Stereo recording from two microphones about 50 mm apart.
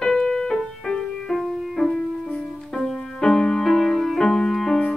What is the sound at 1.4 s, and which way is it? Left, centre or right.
Music, centre.